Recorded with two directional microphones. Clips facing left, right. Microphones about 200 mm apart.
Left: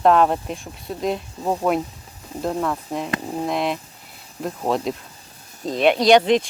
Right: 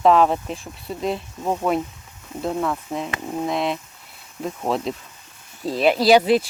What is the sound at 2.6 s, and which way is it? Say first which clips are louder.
Speech: even; centre (ahead or behind).